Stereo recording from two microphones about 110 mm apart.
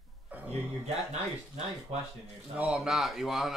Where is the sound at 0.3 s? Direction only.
15° right (ahead or behind).